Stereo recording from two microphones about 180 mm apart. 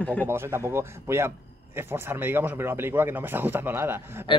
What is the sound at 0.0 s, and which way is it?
Speech, 5° left (ahead or behind).